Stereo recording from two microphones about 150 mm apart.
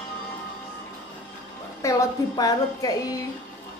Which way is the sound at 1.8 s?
20° left (ahead or behind).